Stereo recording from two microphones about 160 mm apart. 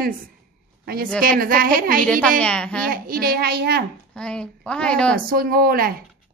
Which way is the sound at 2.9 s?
65° right (ahead or behind).